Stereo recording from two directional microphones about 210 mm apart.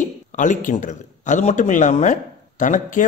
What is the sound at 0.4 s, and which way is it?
Speech, 35° left (ahead or behind).